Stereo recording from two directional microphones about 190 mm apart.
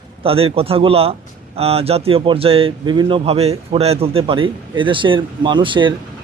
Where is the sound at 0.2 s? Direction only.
30° right (ahead or behind).